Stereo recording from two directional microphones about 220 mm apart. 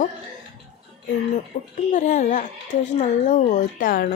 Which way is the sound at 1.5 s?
30° left (ahead or behind).